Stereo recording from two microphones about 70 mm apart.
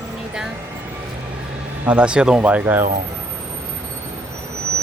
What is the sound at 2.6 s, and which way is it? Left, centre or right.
Speech, right.